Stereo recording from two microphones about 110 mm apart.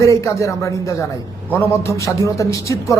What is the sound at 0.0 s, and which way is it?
Speech, 30° left (ahead or behind).